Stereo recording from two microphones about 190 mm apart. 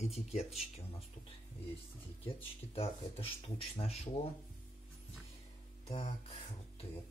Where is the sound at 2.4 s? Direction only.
30° left (ahead or behind).